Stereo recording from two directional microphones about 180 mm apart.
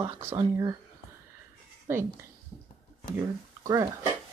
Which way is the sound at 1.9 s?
15° right (ahead or behind).